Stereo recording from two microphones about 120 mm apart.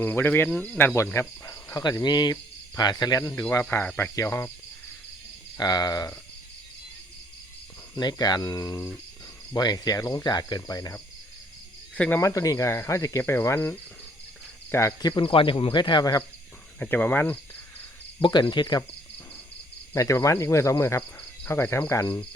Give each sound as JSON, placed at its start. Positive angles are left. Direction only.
{"t": 0.0, "sound": "speech", "side_deg": 15}
{"t": 1.5, "sound": "speech", "side_deg": 30}
{"t": 3.5, "sound": "cricket", "side_deg": 20}
{"t": 5.5, "sound": "speech", "side_deg": 35}
{"t": 7.9, "sound": "speech", "side_deg": 35}
{"t": 11.9, "sound": "speech", "side_deg": 10}
{"t": 12.2, "sound": "cricket", "side_deg": 25}
{"t": 15.1, "sound": "speech", "side_deg": 45}
{"t": 16.8, "sound": "speech", "side_deg": 15}
{"t": 18.2, "sound": "speech", "side_deg": 40}
{"t": 19.9, "sound": "cricket", "side_deg": 25}
{"t": 21.2, "sound": "speech", "side_deg": 20}
{"t": 22.0, "sound": "speech", "side_deg": 40}